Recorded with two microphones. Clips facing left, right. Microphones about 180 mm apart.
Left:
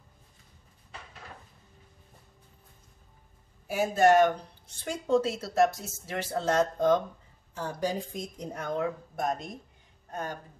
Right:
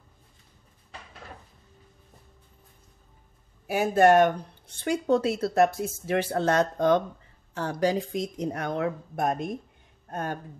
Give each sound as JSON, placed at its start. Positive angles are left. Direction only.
{"t": 3.6, "sound": "speech", "side_deg": -65}